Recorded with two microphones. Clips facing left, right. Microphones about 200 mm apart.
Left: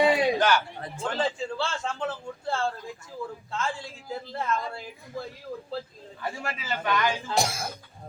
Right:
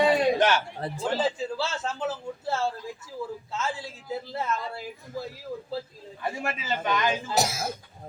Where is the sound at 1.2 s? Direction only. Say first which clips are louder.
Left 3 dB; 5° right (ahead or behind).